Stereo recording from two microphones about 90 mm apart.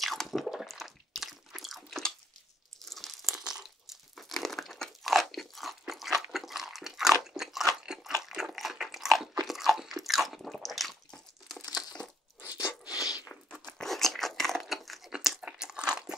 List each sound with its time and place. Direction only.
0.0 s squish: centre (ahead or behind)
2.8 s crunch: 5° left (ahead or behind)
8.2 s biting: 5° right (ahead or behind)
9.5 s crunch: 5° right (ahead or behind)
12.6 s a sound: 40° left (ahead or behind)
13.5 s crunch: 5° left (ahead or behind)